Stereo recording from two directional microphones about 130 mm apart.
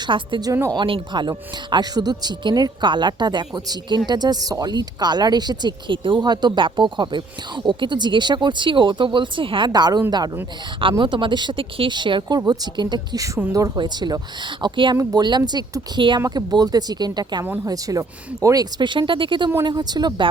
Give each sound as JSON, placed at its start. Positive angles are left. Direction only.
{"t": 0.1, "sound": "speech", "side_deg": -35}
{"t": 0.5, "sound": "speech", "side_deg": -25}
{"t": 0.8, "sound": "speech", "side_deg": -40}